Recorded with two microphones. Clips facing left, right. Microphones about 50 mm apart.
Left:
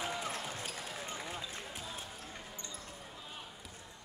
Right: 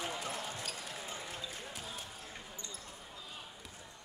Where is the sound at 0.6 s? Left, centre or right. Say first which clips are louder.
Left 1 dB; left.